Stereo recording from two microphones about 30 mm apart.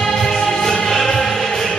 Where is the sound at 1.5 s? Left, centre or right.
Left.